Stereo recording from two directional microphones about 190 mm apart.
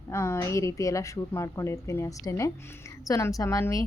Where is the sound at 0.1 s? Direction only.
15° left (ahead or behind).